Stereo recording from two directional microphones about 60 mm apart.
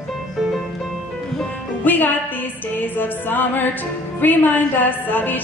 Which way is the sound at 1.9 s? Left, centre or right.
Left.